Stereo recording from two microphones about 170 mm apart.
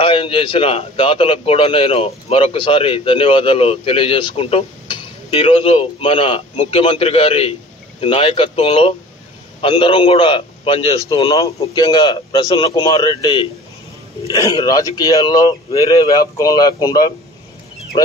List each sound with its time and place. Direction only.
0.0 s a man's voice: 30° left (ahead or behind)